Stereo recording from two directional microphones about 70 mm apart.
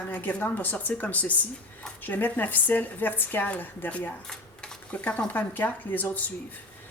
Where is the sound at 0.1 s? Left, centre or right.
Left.